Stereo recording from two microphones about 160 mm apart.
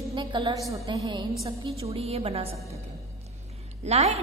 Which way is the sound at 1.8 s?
40° right (ahead or behind).